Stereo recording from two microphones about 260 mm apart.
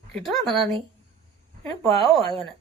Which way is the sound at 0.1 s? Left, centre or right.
Centre.